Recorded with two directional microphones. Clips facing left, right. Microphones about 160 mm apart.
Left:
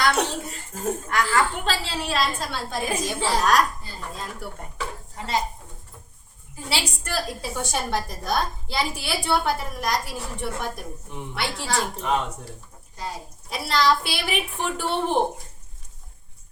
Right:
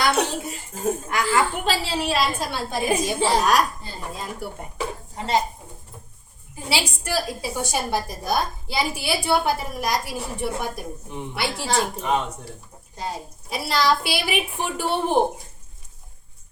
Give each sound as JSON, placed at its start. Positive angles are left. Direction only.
{"t": 0.0, "sound": "a woman's voice", "side_deg": -5}
{"t": 3.4, "sound": "a woman's voice", "side_deg": -10}
{"t": 4.8, "sound": "a sound", "side_deg": -25}
{"t": 6.7, "sound": "a woman's voice", "side_deg": -5}
{"t": 13.0, "sound": "a child's voice", "side_deg": -25}
{"t": 13.5, "sound": "a woman's voice", "side_deg": -5}